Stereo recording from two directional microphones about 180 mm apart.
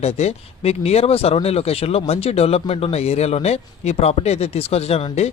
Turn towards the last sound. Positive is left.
turn(degrees=35)  # may be behind; listen again after turning